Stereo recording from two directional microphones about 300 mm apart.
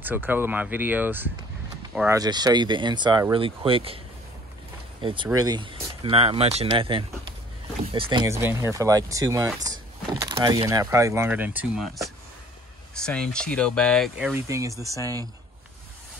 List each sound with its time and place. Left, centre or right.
0.0 s speech: centre
5.0 s speech: centre